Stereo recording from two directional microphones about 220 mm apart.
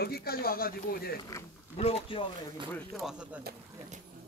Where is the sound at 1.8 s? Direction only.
25° left (ahead or behind).